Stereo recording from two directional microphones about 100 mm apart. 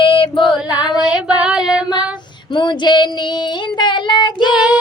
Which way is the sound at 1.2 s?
5° right (ahead or behind).